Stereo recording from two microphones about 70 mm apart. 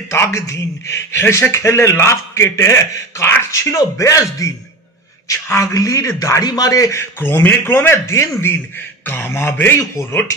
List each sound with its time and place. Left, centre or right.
0.1 s a man's voice: left
3.5 s a man's voice: left
6.4 s a man's voice: left
7.0 s a man's voice: left
8.4 s a man's voice: left